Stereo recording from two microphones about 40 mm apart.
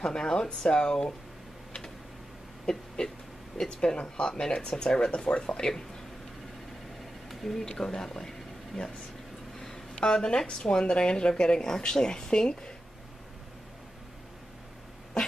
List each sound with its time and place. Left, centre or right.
0.0 s speech: centre
2.6 s a sound: centre
3.6 s speech: left
7.2 s a sound: centre
7.6 s speech: centre
9.9 s speech: left